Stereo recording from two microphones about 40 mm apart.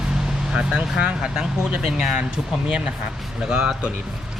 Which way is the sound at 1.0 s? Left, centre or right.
Right.